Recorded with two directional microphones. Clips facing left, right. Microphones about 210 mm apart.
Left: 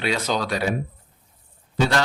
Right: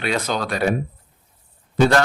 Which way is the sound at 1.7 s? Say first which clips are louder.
Right 5 dB; 55° right (ahead or behind).